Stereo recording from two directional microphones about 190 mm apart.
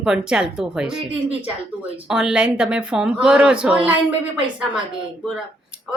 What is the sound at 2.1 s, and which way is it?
A woman's voice, 5° right (ahead or behind).